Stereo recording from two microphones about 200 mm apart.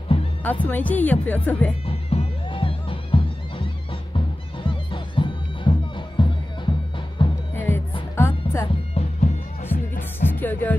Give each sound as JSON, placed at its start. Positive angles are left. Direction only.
{"t": 0.4, "sound": "speech", "side_deg": 10}
{"t": 1.9, "sound": "music", "side_deg": 30}
{"t": 7.5, "sound": "music", "side_deg": 10}
{"t": 8.9, "sound": "bagpipes", "side_deg": 30}
{"t": 9.7, "sound": "music", "side_deg": 10}